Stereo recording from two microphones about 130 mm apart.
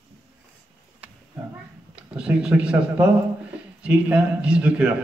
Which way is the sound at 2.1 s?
10° right (ahead or behind).